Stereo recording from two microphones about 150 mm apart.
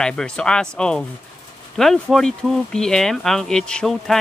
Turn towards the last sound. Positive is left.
turn(degrees=5)  # may be behind; listen again after turning